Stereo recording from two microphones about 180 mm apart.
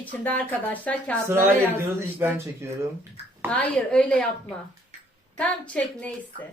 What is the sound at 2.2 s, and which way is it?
Speech, 15° right (ahead or behind).